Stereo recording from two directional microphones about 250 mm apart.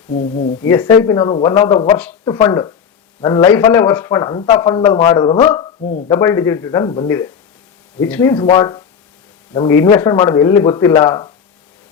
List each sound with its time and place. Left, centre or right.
0.1 s speech: left
0.6 s a man's voice: centre
2.0 s a man's voice: centre
5.8 s speech: left
6.1 s a man's voice: centre